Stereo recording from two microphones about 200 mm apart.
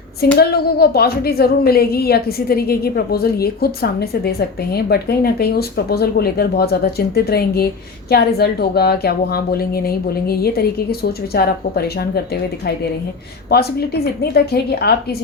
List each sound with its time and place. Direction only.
0.3 s speech: 50° left (ahead or behind)